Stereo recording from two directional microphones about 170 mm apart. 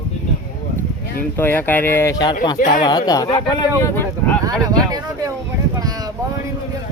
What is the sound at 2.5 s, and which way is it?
Speech, 50° left (ahead or behind).